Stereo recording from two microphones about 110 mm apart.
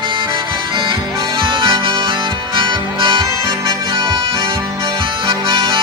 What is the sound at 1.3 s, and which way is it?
Harmonica, 50° right (ahead or behind).